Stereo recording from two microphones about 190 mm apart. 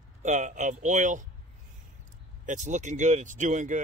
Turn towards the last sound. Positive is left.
turn(degrees=-40)  # may be behind; listen again after turning